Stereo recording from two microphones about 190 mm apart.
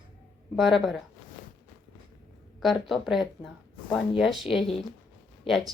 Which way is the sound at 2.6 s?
Centre (ahead or behind).